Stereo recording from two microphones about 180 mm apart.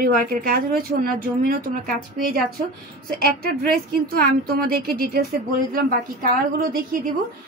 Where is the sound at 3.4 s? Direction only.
55° right (ahead or behind).